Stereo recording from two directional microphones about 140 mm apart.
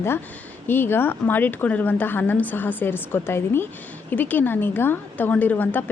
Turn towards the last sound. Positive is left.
turn(degrees=15)  # may be behind; listen again after turning